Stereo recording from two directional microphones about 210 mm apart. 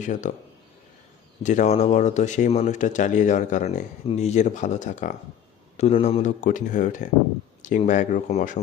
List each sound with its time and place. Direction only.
0.0 s speech: 35° left (ahead or behind)
1.4 s speech: 35° left (ahead or behind)